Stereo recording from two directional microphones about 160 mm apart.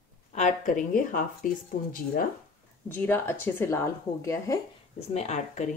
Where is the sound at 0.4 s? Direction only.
55° left (ahead or behind).